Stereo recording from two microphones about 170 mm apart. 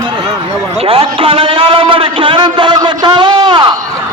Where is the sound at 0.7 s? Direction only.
35° right (ahead or behind).